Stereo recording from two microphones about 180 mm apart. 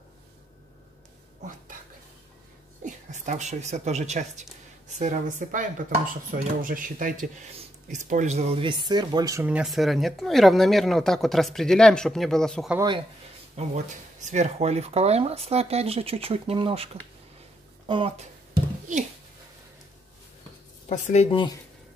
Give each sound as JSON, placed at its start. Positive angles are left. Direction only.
{"t": 2.8, "sound": "speech", "side_deg": -40}
{"t": 9.5, "sound": "speech", "side_deg": -5}
{"t": 13.6, "sound": "speech", "side_deg": -40}
{"t": 20.9, "sound": "speech", "side_deg": 40}